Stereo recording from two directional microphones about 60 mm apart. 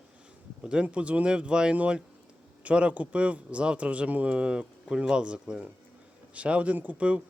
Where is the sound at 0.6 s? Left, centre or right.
Centre.